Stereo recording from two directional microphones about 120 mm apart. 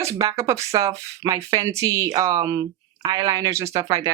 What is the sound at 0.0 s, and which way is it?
Speech, 25° right (ahead or behind).